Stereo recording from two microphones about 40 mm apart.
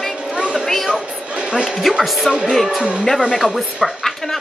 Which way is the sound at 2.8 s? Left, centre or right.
Right.